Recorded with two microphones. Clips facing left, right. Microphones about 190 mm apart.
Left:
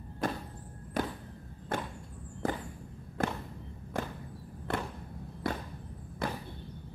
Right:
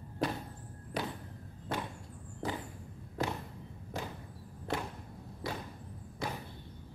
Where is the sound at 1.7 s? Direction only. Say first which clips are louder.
Left 2 dB; 50° left (ahead or behind).